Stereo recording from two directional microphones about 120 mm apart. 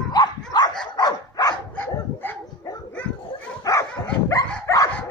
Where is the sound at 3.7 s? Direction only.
30° left (ahead or behind).